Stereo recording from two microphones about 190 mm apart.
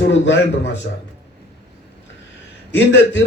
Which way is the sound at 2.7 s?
75° left (ahead or behind).